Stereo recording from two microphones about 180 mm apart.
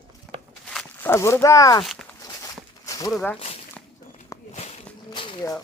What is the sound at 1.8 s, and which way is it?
Speech, 5° left (ahead or behind).